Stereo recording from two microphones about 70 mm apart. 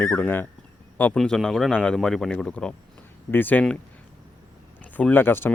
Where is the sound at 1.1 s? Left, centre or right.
Centre.